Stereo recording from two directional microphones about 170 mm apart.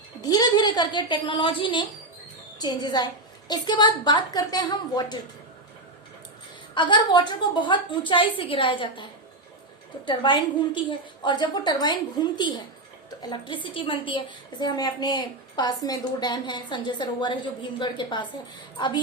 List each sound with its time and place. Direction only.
0.2 s a woman's voice: 25° left (ahead or behind)
6.7 s a woman's voice: 30° left (ahead or behind)
10.1 s a woman's voice: 30° left (ahead or behind)